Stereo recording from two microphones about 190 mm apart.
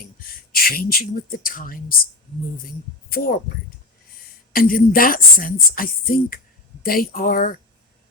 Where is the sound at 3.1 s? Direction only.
50° left (ahead or behind).